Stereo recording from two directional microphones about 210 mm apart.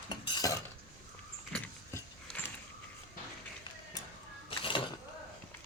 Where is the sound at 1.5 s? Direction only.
5° left (ahead or behind).